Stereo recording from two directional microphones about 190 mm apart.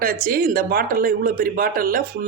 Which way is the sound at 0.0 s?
50° right (ahead or behind).